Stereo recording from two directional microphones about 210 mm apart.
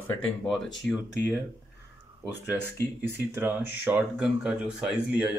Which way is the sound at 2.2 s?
10° right (ahead or behind).